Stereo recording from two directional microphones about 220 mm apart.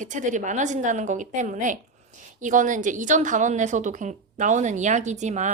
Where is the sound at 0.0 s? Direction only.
35° right (ahead or behind).